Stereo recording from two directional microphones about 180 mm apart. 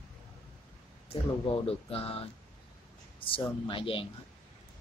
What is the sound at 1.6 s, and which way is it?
Speech, 30° left (ahead or behind).